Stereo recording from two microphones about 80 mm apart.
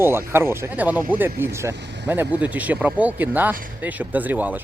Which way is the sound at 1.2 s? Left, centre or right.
Right.